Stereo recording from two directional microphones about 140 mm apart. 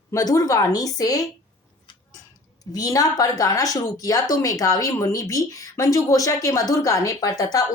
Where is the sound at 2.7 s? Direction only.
25° left (ahead or behind).